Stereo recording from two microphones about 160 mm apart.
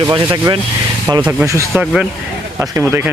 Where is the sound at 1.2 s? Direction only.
15° right (ahead or behind).